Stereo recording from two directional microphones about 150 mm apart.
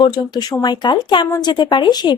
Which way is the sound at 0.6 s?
30° left (ahead or behind).